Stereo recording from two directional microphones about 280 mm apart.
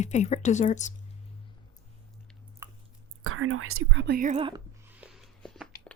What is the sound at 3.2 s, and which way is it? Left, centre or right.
Whispering, right.